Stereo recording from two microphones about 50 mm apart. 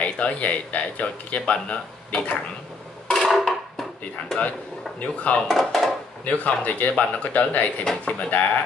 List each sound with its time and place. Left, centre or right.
0.0 s speech: left
3.1 s a sound: centre
5.0 s speech: left
5.5 s speech: centre
6.2 s speech: left
7.8 s speech: centre